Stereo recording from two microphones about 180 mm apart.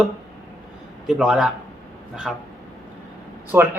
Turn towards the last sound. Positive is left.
turn(degrees=-10)  # may be behind; listen again after turning